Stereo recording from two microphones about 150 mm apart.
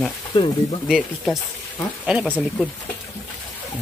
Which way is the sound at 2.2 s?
5° left (ahead or behind).